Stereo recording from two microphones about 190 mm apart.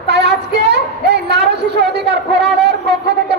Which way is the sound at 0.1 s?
60° right (ahead or behind).